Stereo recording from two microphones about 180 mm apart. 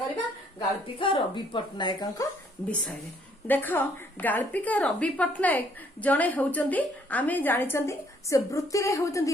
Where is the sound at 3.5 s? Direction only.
10° left (ahead or behind).